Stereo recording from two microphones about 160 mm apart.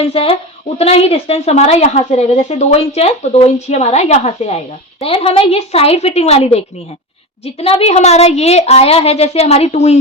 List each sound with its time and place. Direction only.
0.0 s a woman's voice: 35° left (ahead or behind)